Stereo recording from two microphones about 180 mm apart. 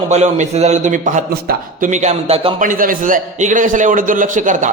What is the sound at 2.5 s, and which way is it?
A man's voice, 50° right (ahead or behind).